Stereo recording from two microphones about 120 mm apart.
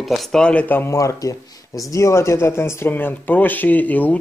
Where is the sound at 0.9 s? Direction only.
30° left (ahead or behind).